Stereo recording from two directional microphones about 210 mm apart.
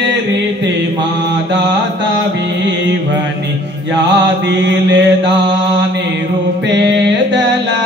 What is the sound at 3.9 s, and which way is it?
Mantra, 55° right (ahead or behind).